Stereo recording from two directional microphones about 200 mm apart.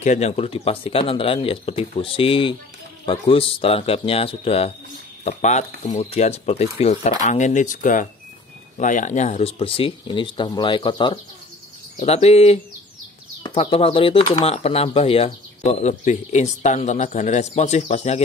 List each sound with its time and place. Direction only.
0.0 s speech: 35° left (ahead or behind)
13.6 s speech: 30° left (ahead or behind)